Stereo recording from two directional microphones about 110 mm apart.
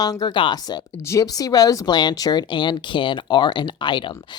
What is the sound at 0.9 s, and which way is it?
Speech, 25° left (ahead or behind).